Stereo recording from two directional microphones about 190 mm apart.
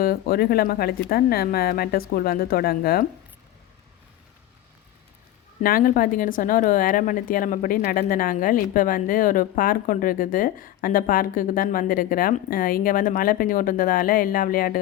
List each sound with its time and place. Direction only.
0.0 s speech: 55° left (ahead or behind)
5.6 s speech: 50° left (ahead or behind)